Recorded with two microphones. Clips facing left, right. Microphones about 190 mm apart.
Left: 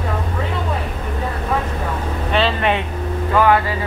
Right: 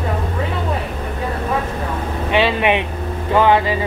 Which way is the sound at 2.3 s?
15° right (ahead or behind).